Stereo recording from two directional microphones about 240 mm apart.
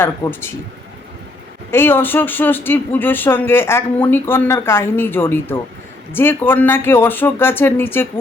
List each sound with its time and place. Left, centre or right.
0.0 s speech: centre
1.7 s speech: centre